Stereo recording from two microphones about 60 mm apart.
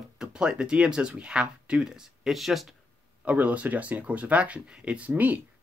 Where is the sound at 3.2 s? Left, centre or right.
Right.